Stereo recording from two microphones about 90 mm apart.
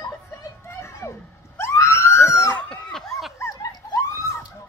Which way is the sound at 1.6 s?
30° left (ahead or behind).